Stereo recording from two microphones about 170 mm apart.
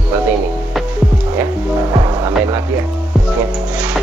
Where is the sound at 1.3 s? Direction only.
15° right (ahead or behind).